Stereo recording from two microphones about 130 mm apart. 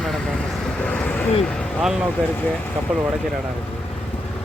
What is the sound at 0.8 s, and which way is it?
Vehicle, 10° left (ahead or behind).